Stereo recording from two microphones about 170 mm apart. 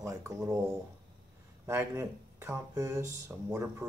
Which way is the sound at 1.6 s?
15° right (ahead or behind).